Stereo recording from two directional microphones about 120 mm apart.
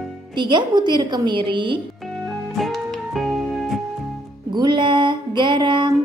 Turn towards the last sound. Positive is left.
turn(degrees=-40)  # may be behind; listen again after turning